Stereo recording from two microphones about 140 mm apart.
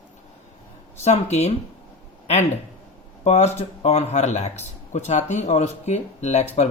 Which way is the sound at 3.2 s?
50° left (ahead or behind).